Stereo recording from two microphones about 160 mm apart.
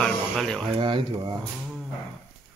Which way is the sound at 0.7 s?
30° right (ahead or behind).